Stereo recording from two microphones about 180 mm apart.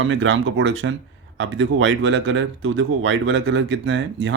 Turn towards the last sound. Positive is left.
turn(degrees=-90)